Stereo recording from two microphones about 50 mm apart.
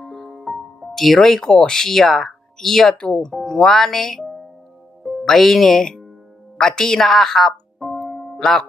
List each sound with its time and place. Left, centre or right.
0.0 s music: centre
3.0 s speech: centre